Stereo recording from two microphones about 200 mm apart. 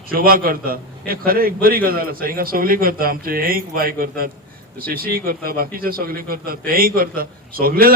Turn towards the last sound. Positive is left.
turn(degrees=-45)  # may be behind; listen again after turning